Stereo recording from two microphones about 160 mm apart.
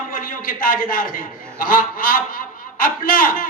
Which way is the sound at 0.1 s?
60° left (ahead or behind).